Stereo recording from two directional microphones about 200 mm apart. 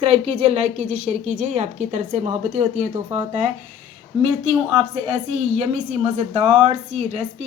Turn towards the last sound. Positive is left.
turn(degrees=-30)  # may be behind; listen again after turning